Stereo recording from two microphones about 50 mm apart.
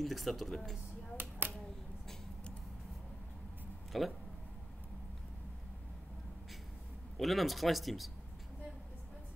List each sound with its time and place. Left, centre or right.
0.0 s speech: centre
1.4 s a sound: right
3.9 s speech: centre
7.2 s speech: centre